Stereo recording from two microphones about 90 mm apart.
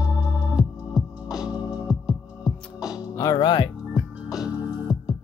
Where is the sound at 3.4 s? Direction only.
55° left (ahead or behind).